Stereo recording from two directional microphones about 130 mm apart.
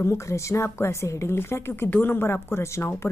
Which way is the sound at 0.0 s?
20° left (ahead or behind).